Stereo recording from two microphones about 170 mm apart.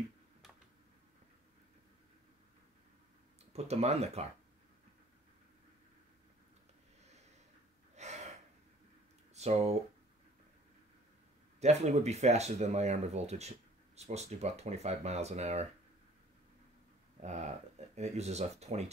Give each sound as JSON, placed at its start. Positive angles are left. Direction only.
{"t": 3.5, "sound": "speech", "side_deg": -40}
{"t": 7.9, "sound": "gasp", "side_deg": -40}
{"t": 9.3, "sound": "speech", "side_deg": -40}
{"t": 11.6, "sound": "speech", "side_deg": -40}
{"t": 17.2, "sound": "speech", "side_deg": -40}